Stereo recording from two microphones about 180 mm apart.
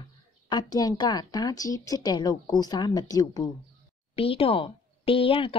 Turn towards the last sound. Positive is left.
turn(degrees=30)  # may be behind; listen again after turning